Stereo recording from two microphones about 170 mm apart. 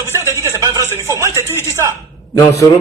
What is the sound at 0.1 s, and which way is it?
A man's voice, 15° right (ahead or behind).